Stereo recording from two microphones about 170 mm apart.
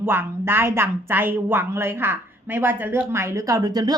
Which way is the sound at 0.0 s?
15° right (ahead or behind).